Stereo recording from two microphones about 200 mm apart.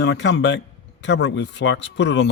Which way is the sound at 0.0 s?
60° left (ahead or behind).